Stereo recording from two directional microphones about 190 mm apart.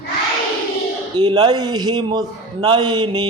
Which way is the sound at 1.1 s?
25° right (ahead or behind).